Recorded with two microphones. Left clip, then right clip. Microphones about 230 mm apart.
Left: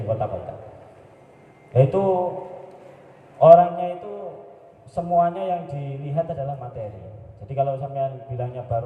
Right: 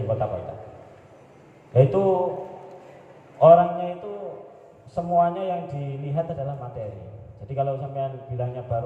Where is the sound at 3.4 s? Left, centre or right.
Left.